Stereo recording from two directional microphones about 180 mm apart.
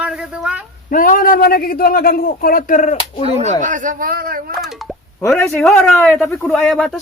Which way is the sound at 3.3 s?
35° right (ahead or behind).